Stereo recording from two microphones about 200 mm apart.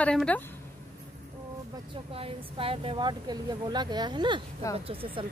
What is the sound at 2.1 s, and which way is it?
Speech, 30° right (ahead or behind).